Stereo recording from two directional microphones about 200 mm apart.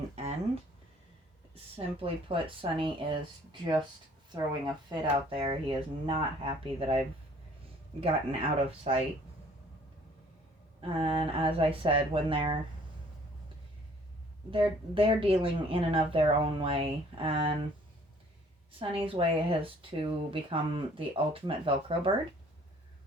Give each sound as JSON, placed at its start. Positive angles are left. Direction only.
{"t": 1.7, "sound": "speech", "side_deg": -25}
{"t": 8.0, "sound": "speech", "side_deg": -30}
{"t": 10.8, "sound": "speech", "side_deg": -25}
{"t": 14.5, "sound": "speech", "side_deg": -25}
{"t": 18.8, "sound": "speech", "side_deg": -25}